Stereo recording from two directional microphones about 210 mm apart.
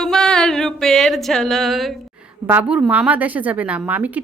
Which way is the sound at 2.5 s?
5° right (ahead or behind).